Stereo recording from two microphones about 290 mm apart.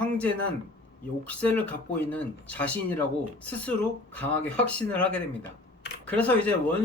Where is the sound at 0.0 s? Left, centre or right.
Centre.